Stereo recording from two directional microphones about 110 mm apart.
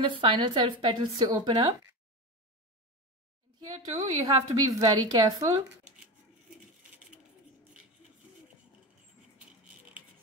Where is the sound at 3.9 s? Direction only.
30° right (ahead or behind).